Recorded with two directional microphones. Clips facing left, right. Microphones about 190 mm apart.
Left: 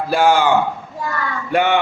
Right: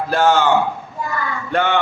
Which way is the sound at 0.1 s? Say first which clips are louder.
Left 1 dB; 10° left (ahead or behind).